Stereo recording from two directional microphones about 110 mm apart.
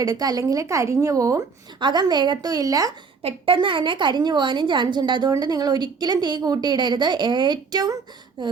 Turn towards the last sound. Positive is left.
turn(degrees=-40)  # may be behind; listen again after turning